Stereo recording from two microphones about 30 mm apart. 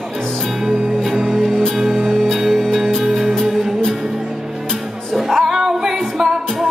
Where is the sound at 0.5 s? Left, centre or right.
Centre.